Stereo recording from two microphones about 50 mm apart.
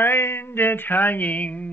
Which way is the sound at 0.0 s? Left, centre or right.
Left.